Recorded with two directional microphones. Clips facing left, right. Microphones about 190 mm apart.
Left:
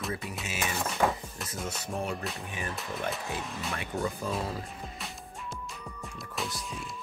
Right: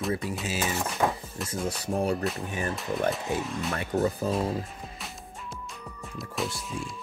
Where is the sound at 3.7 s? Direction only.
35° right (ahead or behind).